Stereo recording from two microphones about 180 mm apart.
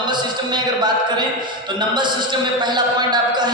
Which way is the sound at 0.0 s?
25° right (ahead or behind).